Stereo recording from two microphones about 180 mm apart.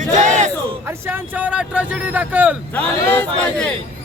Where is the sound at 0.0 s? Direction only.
40° right (ahead or behind).